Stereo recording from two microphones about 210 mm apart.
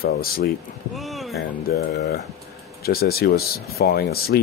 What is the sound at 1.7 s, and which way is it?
Speech, 50° left (ahead or behind).